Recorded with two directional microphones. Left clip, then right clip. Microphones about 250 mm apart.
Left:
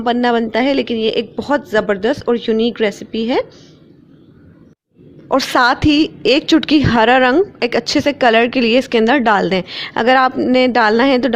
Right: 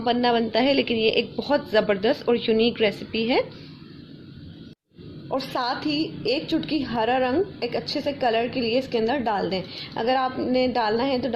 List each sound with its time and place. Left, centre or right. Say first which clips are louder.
0.0 s speech: left 6 dB; left
5.3 s a woman's voice: left 13 dB; left